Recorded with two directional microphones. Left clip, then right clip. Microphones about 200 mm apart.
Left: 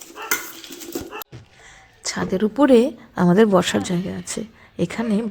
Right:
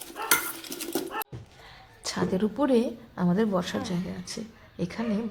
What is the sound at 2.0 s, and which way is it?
A woman's voice, 20° left (ahead or behind).